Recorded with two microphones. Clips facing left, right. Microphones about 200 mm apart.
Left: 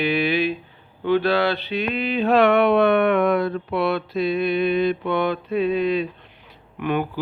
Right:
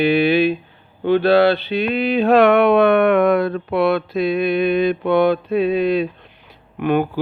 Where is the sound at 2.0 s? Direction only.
70° right (ahead or behind).